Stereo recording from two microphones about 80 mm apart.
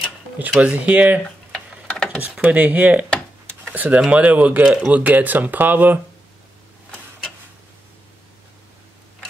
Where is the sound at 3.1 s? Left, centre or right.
Centre.